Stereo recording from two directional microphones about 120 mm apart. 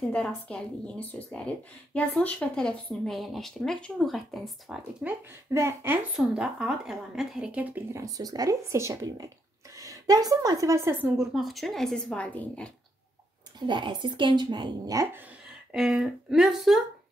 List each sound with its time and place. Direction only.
0.1 s speech: 10° left (ahead or behind)
5.0 s speech: 20° right (ahead or behind)
6.1 s speech: 5° right (ahead or behind)
7.9 s a woman's voice: 30° right (ahead or behind)
11.1 s speech: centre (ahead or behind)
13.7 s speech: 40° right (ahead or behind)
15.7 s speech: centre (ahead or behind)